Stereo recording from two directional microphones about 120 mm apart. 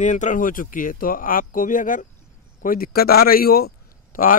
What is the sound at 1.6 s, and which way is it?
Speech, 90° left.